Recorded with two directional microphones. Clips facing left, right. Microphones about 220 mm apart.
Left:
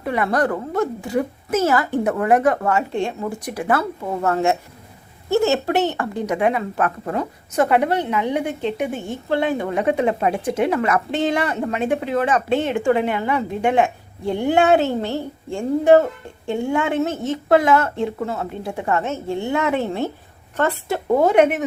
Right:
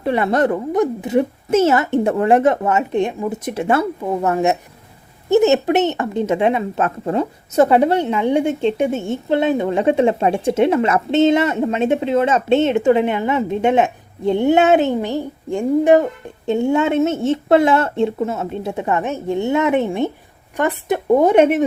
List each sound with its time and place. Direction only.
0.0 s a woman's voice: 30° right (ahead or behind)